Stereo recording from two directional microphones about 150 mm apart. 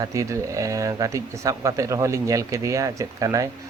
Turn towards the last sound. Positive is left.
turn(degrees=-20)  # may be behind; listen again after turning